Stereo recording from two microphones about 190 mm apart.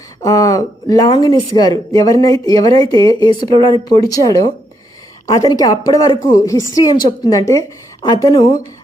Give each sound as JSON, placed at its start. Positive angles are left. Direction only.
{"t": 0.2, "sound": "speech", "side_deg": 20}